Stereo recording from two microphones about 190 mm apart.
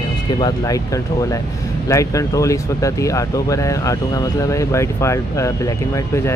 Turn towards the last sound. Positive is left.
turn(degrees=15)  # may be behind; listen again after turning